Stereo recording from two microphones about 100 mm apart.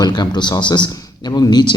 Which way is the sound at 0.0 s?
45° left (ahead or behind).